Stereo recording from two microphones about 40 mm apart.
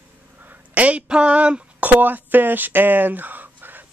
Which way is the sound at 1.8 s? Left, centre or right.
Right.